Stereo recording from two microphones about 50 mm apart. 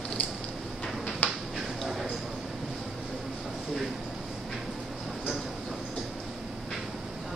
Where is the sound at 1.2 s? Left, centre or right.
Left.